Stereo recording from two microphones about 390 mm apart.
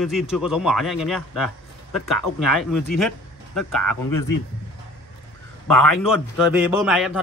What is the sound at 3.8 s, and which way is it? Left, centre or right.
Speech, left.